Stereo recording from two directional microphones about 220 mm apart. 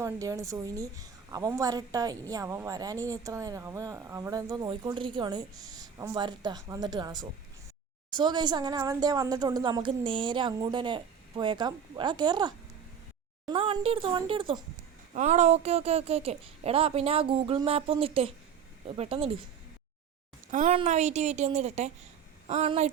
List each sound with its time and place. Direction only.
0.0 s a woman's voice: 15° right (ahead or behind)
20.5 s a woman's voice: 35° right (ahead or behind)